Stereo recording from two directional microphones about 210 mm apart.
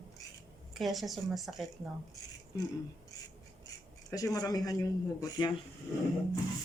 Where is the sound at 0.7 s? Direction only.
Centre (ahead or behind).